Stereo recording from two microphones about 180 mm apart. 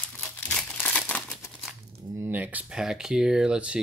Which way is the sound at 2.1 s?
10° right (ahead or behind).